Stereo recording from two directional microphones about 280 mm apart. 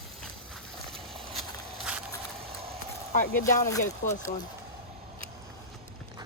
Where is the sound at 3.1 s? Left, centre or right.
Left.